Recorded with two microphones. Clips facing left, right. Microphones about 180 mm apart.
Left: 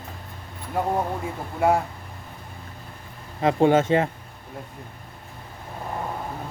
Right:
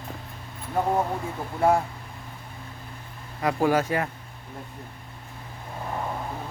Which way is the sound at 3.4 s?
25° left (ahead or behind).